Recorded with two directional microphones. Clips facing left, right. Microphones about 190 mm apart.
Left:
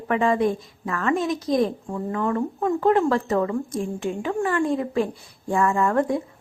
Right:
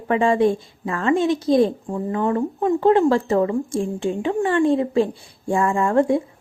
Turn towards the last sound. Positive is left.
turn(degrees=-25)  # may be behind; listen again after turning